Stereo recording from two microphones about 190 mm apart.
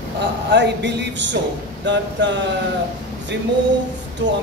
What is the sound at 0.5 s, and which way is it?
A man's voice, 65° right (ahead or behind).